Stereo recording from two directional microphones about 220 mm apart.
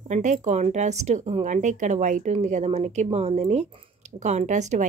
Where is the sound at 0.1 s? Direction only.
35° right (ahead or behind).